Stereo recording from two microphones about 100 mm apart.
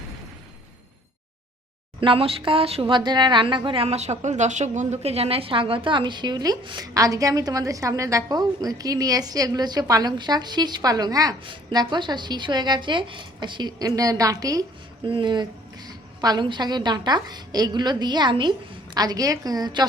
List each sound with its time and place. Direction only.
2.0 s speech: 65° right (ahead or behind)
2.9 s a woman's voice: 50° right (ahead or behind)
11.4 s a woman's voice: 50° right (ahead or behind)
15.0 s a woman's voice: 55° right (ahead or behind)